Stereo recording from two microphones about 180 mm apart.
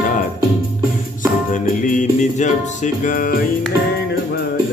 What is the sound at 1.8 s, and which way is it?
Music, 45° left (ahead or behind).